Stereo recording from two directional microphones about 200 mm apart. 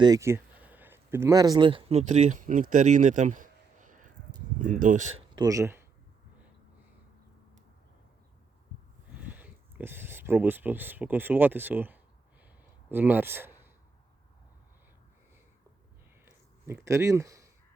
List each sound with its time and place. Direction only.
0.0 s speech: 15° right (ahead or behind); by 5.2 s 35° right (ahead or behind)
5.3 s a man's voice: 20° right (ahead or behind)
9.2 s speech: 10° right (ahead or behind)
16.2 s a sound: 10° right (ahead or behind)